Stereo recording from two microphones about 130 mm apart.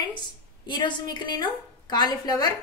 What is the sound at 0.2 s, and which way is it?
A woman's voice, 35° left (ahead or behind).